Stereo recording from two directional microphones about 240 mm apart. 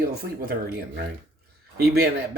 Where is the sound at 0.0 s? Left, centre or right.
Right.